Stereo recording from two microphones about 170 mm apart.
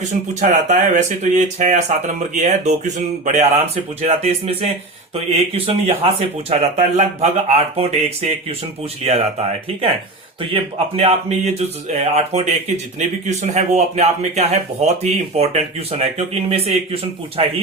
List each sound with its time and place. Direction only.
0.1 s speech: 45° right (ahead or behind)
4.0 s speech: 35° right (ahead or behind)